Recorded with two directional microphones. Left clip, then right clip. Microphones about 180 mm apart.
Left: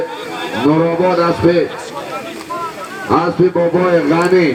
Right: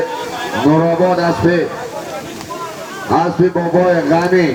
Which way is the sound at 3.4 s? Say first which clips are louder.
Even; 35° right (ahead or behind).